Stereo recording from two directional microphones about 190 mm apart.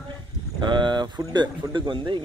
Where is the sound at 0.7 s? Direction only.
25° right (ahead or behind).